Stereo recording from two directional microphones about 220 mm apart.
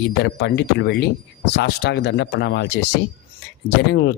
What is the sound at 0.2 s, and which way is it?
Speech, 50° left (ahead or behind).